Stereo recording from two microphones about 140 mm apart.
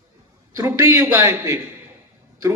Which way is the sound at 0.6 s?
20° right (ahead or behind).